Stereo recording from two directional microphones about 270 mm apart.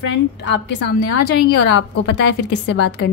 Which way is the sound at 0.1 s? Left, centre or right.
Left.